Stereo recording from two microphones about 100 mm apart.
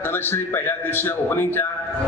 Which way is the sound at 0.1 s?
20° left (ahead or behind).